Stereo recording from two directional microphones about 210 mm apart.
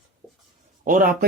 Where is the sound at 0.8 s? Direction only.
40° right (ahead or behind).